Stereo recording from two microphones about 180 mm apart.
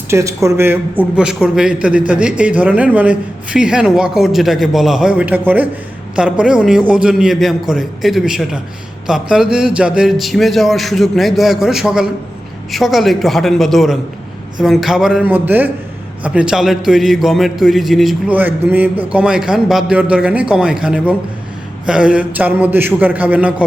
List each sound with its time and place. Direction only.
0.1 s a man's voice: 15° right (ahead or behind)